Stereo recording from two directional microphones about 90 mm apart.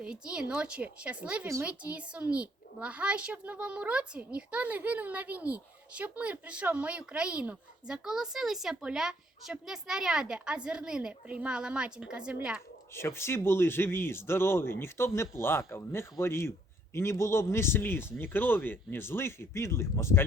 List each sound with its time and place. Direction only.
0.0 s a child's voice: 10° right (ahead or behind)
12.9 s speech: 30° left (ahead or behind)